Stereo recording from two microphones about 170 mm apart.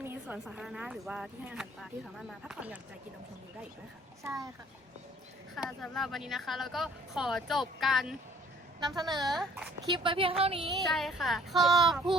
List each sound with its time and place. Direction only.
0.0 s a sound: 15° right (ahead or behind)
0.4 s speech: 5° right (ahead or behind)
4.2 s speech: 15° right (ahead or behind)
5.5 s speech: centre (ahead or behind)
9.0 s speech: 25° right (ahead or behind)
9.2 s speech: centre (ahead or behind)
9.8 s speech: 30° right (ahead or behind)
10.4 s music: 35° right (ahead or behind)
10.7 s speech: centre (ahead or behind)